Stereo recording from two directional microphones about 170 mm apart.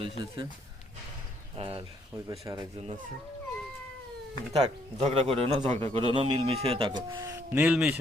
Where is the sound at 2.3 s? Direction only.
20° right (ahead or behind).